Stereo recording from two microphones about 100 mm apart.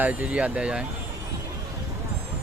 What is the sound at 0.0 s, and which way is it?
Speech, 15° right (ahead or behind).